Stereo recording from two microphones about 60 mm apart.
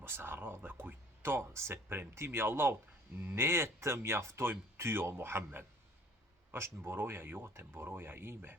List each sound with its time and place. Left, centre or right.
0.0 s speech: right